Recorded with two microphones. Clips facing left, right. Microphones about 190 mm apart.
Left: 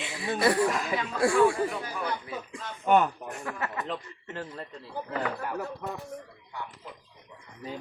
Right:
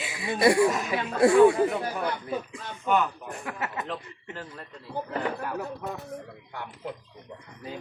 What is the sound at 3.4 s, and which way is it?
Speech, 20° right (ahead or behind).